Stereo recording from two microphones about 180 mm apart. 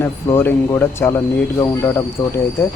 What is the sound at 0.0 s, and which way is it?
Speech, 15° left (ahead or behind).